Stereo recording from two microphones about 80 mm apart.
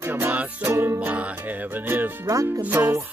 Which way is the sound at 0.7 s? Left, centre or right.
Right.